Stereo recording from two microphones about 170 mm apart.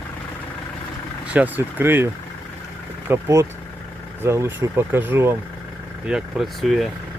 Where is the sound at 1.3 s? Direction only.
10° right (ahead or behind).